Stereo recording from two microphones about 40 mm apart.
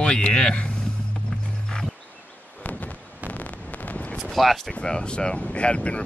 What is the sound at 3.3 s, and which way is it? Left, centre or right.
Wind noise, left.